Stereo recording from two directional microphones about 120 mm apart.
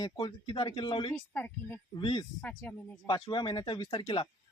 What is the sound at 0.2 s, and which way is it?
Speech, 45° left (ahead or behind).